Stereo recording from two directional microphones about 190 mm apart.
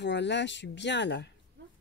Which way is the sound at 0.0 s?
65° left (ahead or behind).